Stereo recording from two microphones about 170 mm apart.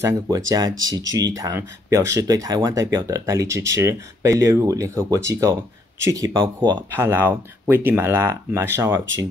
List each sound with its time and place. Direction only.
0.0 s speech: 20° right (ahead or behind)
7.0 s speech: 15° right (ahead or behind)